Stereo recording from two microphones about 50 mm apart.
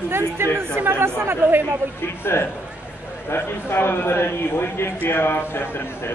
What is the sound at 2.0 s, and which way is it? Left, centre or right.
A man's voice, left.